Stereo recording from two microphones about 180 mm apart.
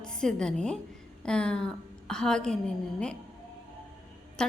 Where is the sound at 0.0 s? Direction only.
5° left (ahead or behind).